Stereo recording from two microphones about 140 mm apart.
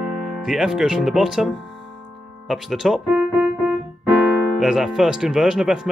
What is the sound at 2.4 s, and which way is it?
Keyboard, centre (ahead or behind).